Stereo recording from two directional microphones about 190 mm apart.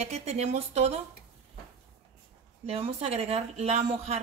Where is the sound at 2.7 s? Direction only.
30° right (ahead or behind).